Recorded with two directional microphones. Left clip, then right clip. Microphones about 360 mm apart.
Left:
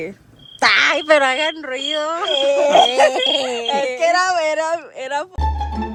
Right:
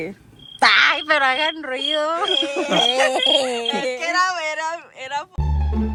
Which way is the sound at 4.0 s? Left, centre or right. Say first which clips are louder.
Left 5 dB; left.